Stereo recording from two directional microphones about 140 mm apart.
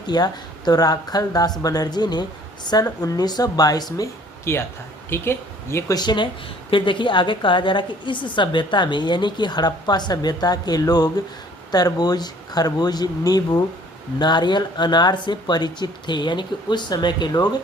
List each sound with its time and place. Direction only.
0.1 s speech: 30° left (ahead or behind)
6.0 s a woman's voice: 30° left (ahead or behind)